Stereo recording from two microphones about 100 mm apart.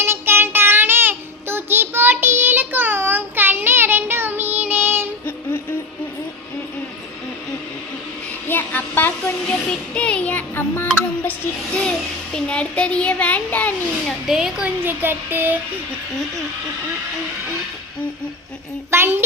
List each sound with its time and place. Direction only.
0.0 s child singing: 25° right (ahead or behind)
8.4 s hair dryer: 20° left (ahead or behind)
10.8 s tick: 20° left (ahead or behind)
12.3 s a child's voice: 10° left (ahead or behind)
14.3 s speech: 5° right (ahead or behind)
14.8 s child singing: 20° right (ahead or behind)
18.9 s child singing: 25° right (ahead or behind)